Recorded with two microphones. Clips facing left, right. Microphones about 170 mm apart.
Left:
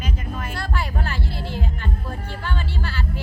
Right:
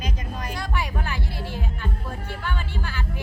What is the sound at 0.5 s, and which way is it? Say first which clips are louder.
Music: left 1 dB; 15° right (ahead or behind).